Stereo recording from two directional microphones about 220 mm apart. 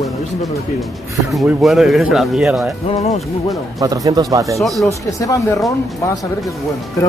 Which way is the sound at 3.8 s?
15° right (ahead or behind).